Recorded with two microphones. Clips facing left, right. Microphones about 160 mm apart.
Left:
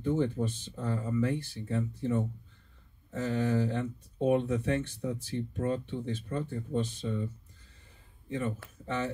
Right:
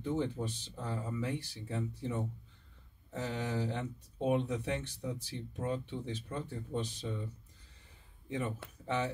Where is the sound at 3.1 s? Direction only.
15° right (ahead or behind).